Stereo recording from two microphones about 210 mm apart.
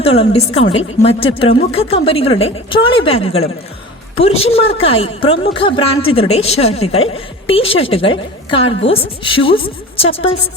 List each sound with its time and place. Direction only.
0.0 s a woman's voice: 30° left (ahead or behind)